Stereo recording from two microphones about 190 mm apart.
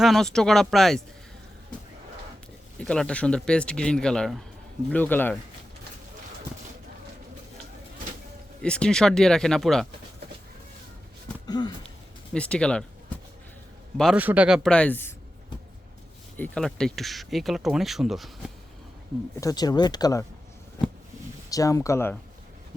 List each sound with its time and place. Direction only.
0.0 s speech: centre (ahead or behind)
2.7 s speech: 5° left (ahead or behind)
8.6 s speech: 5° left (ahead or behind)
11.4 s a sound: 20° left (ahead or behind)
12.3 s speech: 5° left (ahead or behind)
14.0 s speech: 5° right (ahead or behind); by 15.1 s 10° left (ahead or behind)
16.4 s speech: 5° left (ahead or behind)
19.4 s speech: 20° left (ahead or behind)
21.5 s speech: 15° left (ahead or behind)